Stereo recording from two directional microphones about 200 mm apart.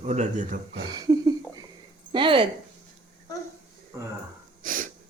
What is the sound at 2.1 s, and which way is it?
Speech, 25° right (ahead or behind).